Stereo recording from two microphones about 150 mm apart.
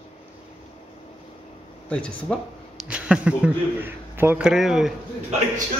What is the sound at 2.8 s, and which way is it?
Speech, 5° right (ahead or behind).